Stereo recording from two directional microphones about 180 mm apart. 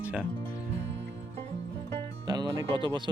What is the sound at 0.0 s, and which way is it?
Music, 5° right (ahead or behind).